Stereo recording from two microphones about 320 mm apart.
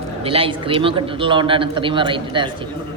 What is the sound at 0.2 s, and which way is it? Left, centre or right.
A man's voice, centre.